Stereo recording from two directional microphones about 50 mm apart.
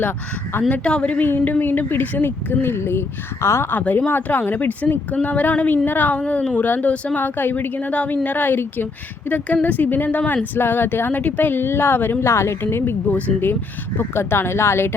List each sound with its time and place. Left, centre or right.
0.5 s speech: left
0.9 s speech: left
1.2 s a woman's voice: left
3.8 s speech: left
6.1 s speech: left
12.2 s a woman's voice: left
12.6 s speech: left
13.1 s speech: left
13.4 s speech: left